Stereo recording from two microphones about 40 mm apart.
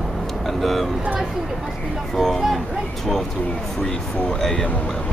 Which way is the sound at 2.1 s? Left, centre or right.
Centre.